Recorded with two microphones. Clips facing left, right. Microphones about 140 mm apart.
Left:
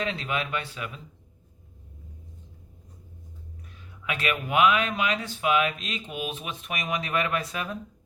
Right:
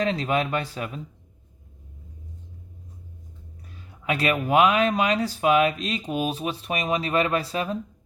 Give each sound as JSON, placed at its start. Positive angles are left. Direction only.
{"t": 0.0, "sound": "speech", "side_deg": -40}
{"t": 4.0, "sound": "speech", "side_deg": -35}